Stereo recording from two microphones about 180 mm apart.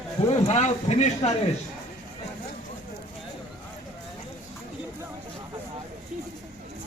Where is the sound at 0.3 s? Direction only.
35° left (ahead or behind).